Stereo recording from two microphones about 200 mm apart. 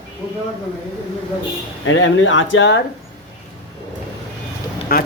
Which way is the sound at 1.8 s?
70° left (ahead or behind).